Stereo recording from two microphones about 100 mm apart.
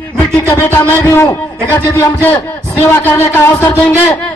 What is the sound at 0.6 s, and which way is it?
A man's voice, 25° left (ahead or behind).